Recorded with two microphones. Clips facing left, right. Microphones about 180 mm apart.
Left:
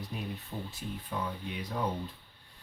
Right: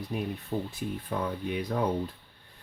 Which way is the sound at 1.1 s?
55° right (ahead or behind).